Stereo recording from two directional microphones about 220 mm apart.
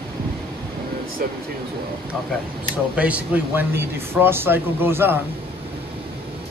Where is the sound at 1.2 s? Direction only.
40° right (ahead or behind).